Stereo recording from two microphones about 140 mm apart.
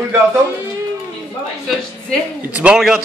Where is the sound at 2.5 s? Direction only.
5° right (ahead or behind).